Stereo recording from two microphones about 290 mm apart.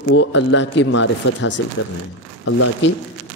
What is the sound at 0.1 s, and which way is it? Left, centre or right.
Speech, left.